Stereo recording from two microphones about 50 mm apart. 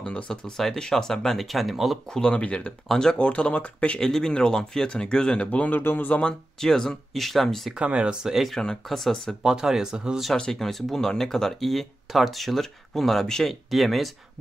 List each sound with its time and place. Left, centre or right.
0.0 s speech: centre
2.0 s speech: centre
3.2 s speech: left
4.0 s speech: centre; by 5.8 s left
5.8 s speech: left
6.6 s speech: centre
7.7 s speech: right
8.8 s speech: centre
9.1 s speech: centre
9.4 s speech: centre
10.3 s speech: centre
10.6 s speech: centre
13.7 s speech: centre